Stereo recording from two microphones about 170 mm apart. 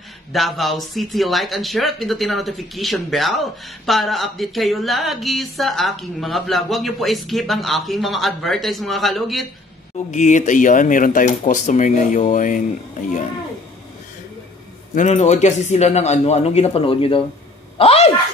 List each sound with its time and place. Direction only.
0.3 s speech: centre (ahead or behind)
10.1 s speech: 45° left (ahead or behind)
15.0 s speech: 40° left (ahead or behind)